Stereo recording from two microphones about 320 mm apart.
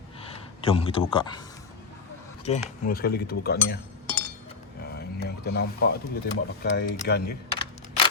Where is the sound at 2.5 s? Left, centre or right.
Centre.